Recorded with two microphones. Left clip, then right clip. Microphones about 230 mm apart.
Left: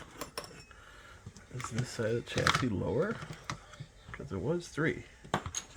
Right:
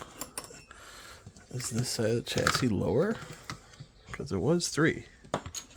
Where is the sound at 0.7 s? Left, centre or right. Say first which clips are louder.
Right 5 dB; right.